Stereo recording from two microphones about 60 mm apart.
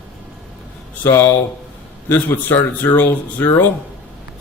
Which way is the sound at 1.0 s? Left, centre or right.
Left.